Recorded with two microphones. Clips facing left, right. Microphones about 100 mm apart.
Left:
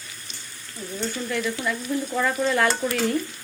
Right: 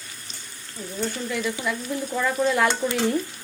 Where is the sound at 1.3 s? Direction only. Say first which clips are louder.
Left 2 dB; 10° right (ahead or behind).